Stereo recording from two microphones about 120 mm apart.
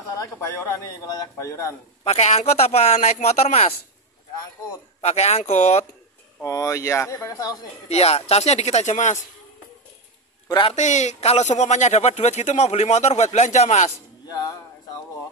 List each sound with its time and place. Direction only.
0.1 s speech: 25° left (ahead or behind)
2.0 s a man's voice: 60° left (ahead or behind)
5.0 s a man's voice: 60° left (ahead or behind)
6.4 s speech: 25° left (ahead or behind)
7.9 s a man's voice: 60° left (ahead or behind); by 9.2 s 85° left
10.7 s speech: 75° left (ahead or behind)
13.8 s a man's voice: 30° left (ahead or behind)